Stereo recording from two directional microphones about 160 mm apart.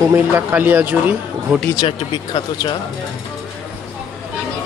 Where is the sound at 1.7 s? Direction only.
30° left (ahead or behind).